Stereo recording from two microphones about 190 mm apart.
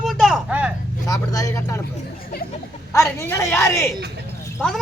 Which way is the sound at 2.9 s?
15° left (ahead or behind).